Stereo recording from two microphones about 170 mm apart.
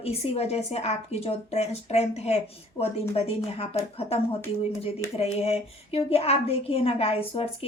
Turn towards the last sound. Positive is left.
turn(degrees=35)  # may be behind; listen again after turning